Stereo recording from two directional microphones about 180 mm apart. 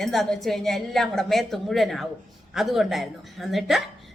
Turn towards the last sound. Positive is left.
turn(degrees=0)  # may be behind; listen again after turning